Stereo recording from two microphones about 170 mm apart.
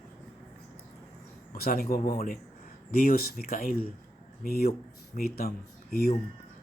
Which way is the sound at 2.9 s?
60° left (ahead or behind).